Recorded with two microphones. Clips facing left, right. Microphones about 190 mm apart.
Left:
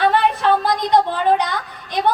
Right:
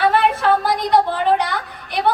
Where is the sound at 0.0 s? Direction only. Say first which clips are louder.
Even; 20° left (ahead or behind).